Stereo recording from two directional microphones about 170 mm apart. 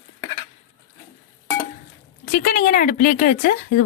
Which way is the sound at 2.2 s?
60° left (ahead or behind).